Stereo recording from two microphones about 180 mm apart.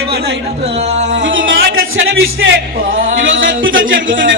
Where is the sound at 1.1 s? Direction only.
90° right.